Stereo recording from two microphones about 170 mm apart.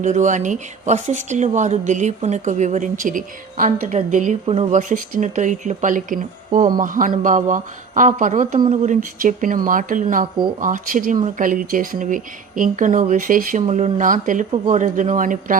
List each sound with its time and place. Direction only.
0.0 s speech: 45° right (ahead or behind)
8.5 s speech: 35° right (ahead or behind); by 13.6 s 50° right (ahead or behind)
13.6 s speech: 40° right (ahead or behind)